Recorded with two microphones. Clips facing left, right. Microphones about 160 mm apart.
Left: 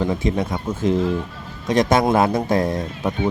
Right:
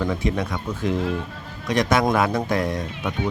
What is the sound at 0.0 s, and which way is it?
Speech, 25° left (ahead or behind).